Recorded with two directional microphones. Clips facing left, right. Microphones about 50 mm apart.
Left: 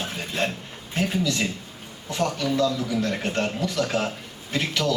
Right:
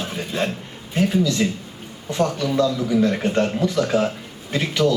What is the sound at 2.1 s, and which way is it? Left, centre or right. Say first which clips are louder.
Speech: right 4 dB; right.